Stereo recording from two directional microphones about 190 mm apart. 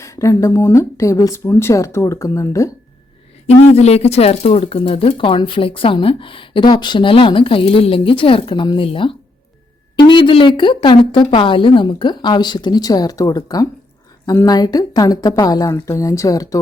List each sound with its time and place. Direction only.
0.0 s speech: 15° left (ahead or behind)
3.4 s speech: 35° left (ahead or behind); by 16.6 s 15° left (ahead or behind)